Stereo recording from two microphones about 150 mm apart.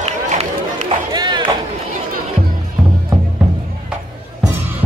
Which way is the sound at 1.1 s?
30° right (ahead or behind).